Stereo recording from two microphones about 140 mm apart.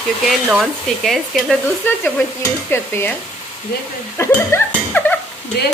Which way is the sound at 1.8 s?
15° left (ahead or behind).